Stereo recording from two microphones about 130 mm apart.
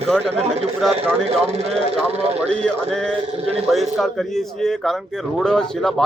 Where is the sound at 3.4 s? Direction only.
50° right (ahead or behind).